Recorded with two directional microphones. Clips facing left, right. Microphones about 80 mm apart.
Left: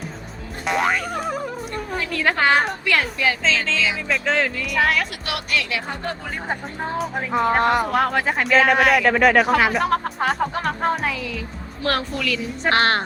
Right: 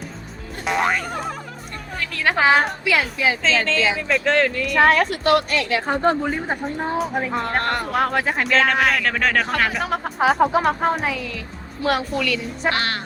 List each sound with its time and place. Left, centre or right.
0.6 s boing: centre
2.1 s speech: centre
4.8 s a woman's voice: right
6.5 s speech: centre
12.7 s speech: left